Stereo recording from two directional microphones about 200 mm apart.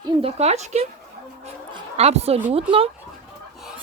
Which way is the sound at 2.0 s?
30° right (ahead or behind).